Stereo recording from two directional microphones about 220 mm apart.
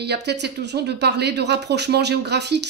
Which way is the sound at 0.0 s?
50° right (ahead or behind).